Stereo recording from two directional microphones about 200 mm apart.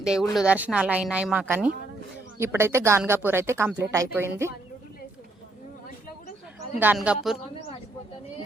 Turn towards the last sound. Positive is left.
turn(degrees=-5)  # may be behind; listen again after turning